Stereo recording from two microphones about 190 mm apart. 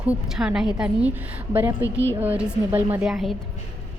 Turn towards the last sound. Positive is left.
turn(degrees=0)  # may be behind; listen again after turning